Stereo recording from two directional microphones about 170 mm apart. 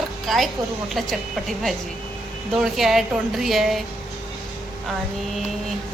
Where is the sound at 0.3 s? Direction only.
Centre (ahead or behind).